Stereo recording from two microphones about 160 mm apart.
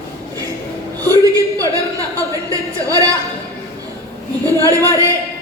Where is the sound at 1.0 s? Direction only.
20° right (ahead or behind).